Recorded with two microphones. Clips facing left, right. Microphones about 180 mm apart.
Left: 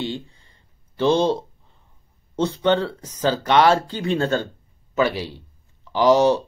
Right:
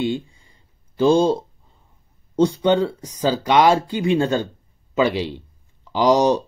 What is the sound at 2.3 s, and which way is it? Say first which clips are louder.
Speech: right 3 dB; 10° right (ahead or behind).